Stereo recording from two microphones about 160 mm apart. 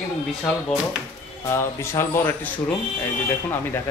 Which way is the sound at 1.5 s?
15° left (ahead or behind).